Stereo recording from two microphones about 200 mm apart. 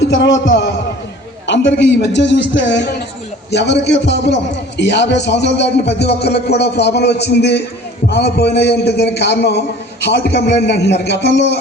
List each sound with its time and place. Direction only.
0.1 s a man's voice: 65° left (ahead or behind)